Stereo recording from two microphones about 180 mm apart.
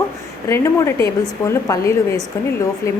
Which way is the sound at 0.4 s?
15° left (ahead or behind).